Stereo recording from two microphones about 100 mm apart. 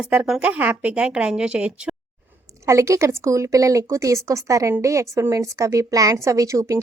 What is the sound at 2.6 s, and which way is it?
A woman's voice, 30° right (ahead or behind).